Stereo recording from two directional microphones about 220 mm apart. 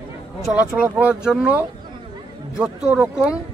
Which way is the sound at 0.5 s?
5° right (ahead or behind).